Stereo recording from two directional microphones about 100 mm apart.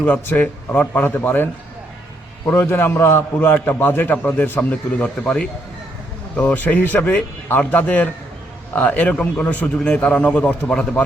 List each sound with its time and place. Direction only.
0.0 s a man's voice: 15° left (ahead or behind)
2.5 s a man's voice: 20° left (ahead or behind)